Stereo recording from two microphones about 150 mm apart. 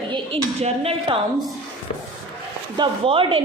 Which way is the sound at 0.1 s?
40° right (ahead or behind).